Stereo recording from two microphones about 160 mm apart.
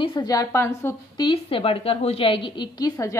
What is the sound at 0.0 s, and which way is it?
A woman's voice, 25° left (ahead or behind).